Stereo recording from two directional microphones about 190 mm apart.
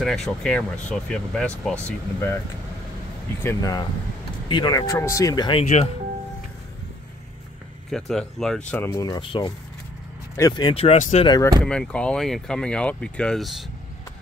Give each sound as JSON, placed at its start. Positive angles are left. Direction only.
{"t": 0.0, "sound": "speech", "side_deg": 0}
{"t": 3.4, "sound": "speech", "side_deg": 20}
{"t": 7.9, "sound": "speech", "side_deg": 0}
{"t": 9.0, "sound": "speech", "side_deg": 25}
{"t": 11.2, "sound": "speech", "side_deg": 20}
{"t": 11.6, "sound": "speech", "side_deg": 5}